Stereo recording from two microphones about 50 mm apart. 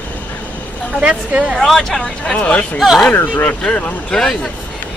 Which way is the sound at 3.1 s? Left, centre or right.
Left.